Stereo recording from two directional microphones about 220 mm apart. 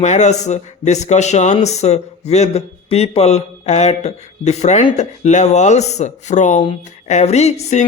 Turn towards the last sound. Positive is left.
turn(degrees=30)  # may be behind; listen again after turning